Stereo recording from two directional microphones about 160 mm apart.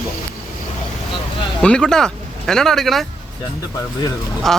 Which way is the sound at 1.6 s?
5° left (ahead or behind).